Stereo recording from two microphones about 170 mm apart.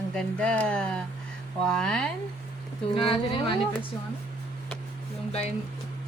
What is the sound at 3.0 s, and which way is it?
Speech, 30° left (ahead or behind).